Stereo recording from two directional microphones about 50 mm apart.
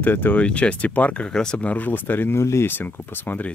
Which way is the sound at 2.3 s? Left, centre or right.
Left.